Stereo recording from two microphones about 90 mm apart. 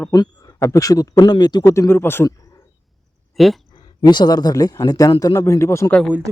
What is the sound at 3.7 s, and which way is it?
Speech, 55° left (ahead or behind).